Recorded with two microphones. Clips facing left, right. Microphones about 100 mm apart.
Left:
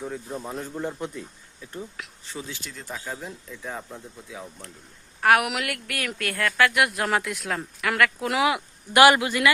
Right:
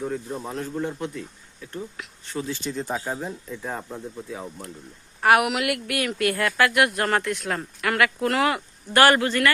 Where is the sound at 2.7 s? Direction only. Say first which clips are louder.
Right 7 dB; 30° right (ahead or behind).